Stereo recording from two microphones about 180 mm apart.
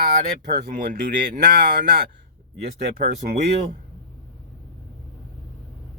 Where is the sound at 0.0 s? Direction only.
60° right (ahead or behind).